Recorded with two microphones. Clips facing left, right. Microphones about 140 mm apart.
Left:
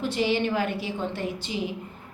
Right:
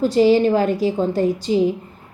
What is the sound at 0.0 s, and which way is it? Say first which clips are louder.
A woman's voice: right 11 dB; 40° right (ahead or behind).